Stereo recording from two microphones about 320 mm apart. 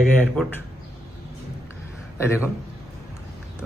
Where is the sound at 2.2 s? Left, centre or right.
Centre.